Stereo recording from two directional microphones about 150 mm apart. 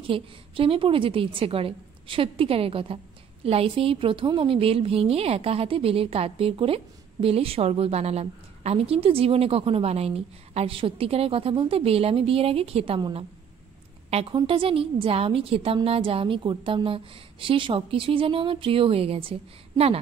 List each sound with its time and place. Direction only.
0.0 s a woman's voice: 35° right (ahead or behind)